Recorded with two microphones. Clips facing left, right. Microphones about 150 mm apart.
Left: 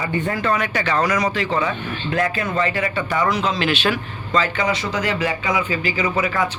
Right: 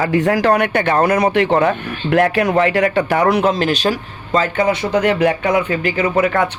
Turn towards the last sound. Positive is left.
turn(degrees=-60)  # may be behind; listen again after turning